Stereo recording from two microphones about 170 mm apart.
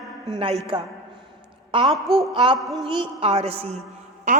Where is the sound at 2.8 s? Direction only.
30° right (ahead or behind).